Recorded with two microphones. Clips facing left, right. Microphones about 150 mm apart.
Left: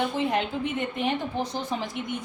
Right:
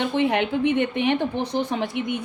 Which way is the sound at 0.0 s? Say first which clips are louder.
Right 4 dB; 70° right (ahead or behind).